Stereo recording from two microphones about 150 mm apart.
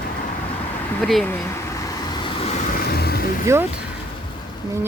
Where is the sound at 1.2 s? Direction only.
15° left (ahead or behind).